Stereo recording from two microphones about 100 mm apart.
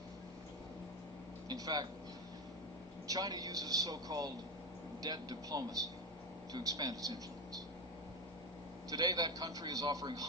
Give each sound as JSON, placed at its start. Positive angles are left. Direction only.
{"t": 1.5, "sound": "speech", "side_deg": -40}
{"t": 3.1, "sound": "a man's voice", "side_deg": -40}
{"t": 8.9, "sound": "a man's voice", "side_deg": -40}